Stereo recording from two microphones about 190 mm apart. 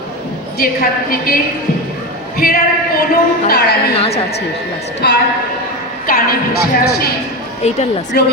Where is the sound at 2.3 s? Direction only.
50° left (ahead or behind).